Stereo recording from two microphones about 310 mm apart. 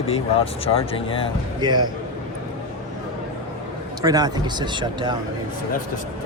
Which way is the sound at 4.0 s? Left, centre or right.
Centre.